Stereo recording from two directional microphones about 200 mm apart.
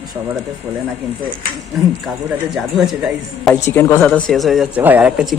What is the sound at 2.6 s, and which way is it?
Speech, centre (ahead or behind).